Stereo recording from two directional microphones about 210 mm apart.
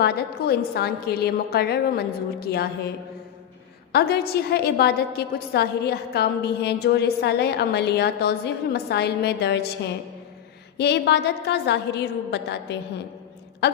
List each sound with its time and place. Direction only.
0.0 s a woman's voice: 50° left (ahead or behind)
3.9 s a woman's voice: 50° left (ahead or behind)